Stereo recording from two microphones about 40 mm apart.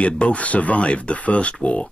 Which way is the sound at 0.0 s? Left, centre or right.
Left.